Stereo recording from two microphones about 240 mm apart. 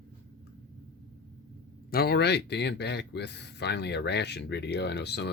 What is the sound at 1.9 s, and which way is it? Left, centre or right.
Speech, left.